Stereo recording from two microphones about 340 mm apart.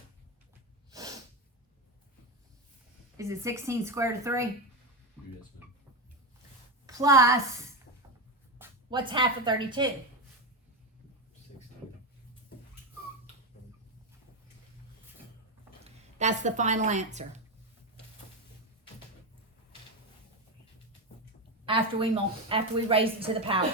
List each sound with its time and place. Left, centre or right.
0.9 s snort: centre
3.2 s a woman's voice: centre
6.8 s a woman's voice: centre
8.5 s speech: centre
15.8 s speech: centre
21.7 s a woman's voice: centre